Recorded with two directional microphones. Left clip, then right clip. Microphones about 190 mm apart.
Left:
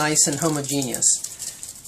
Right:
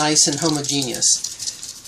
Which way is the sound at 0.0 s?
15° left (ahead or behind).